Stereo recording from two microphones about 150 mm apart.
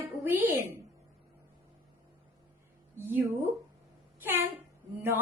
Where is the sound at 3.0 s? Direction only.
15° right (ahead or behind).